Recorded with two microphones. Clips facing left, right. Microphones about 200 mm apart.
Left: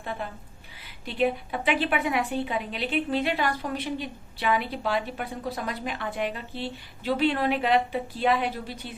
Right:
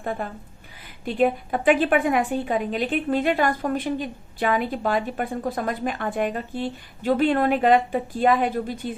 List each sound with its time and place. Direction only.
0.0 s a woman's voice: 45° right (ahead or behind)